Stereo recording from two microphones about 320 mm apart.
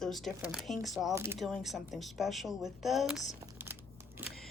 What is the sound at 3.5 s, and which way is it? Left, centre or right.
Crumpling, centre.